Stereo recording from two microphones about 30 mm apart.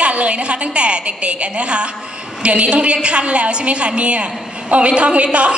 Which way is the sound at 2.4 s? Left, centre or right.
Right.